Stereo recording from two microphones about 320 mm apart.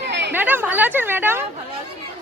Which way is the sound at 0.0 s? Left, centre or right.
Right.